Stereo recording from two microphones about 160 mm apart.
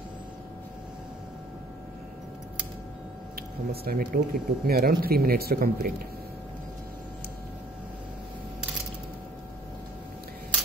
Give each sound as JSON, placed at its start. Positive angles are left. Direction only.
{"t": 3.8, "sound": "speech", "side_deg": -75}